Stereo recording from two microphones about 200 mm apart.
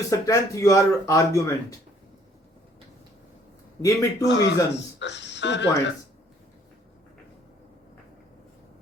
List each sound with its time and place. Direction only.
0.1 s speech: 15° left (ahead or behind)
3.8 s speech: 15° left (ahead or behind)
4.3 s speech: 65° left (ahead or behind)